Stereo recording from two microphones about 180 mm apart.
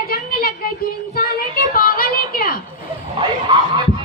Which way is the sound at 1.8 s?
55° left (ahead or behind).